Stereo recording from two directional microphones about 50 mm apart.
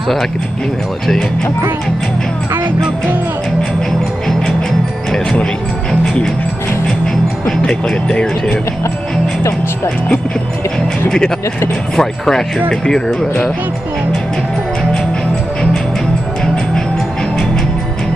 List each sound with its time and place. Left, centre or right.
5.4 s music: centre
7.4 s speech: centre
11.1 s speech: centre